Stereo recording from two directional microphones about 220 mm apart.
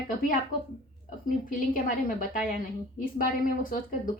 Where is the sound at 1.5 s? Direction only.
40° left (ahead or behind).